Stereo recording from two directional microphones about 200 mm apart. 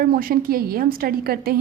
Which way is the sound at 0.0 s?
45° right (ahead or behind).